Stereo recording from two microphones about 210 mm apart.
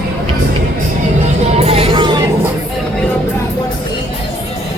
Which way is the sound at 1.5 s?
30° right (ahead or behind).